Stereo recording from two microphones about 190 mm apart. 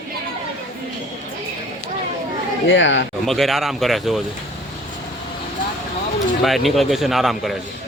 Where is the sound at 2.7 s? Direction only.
75° left (ahead or behind).